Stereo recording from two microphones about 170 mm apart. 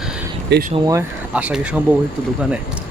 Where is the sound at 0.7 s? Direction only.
20° right (ahead or behind).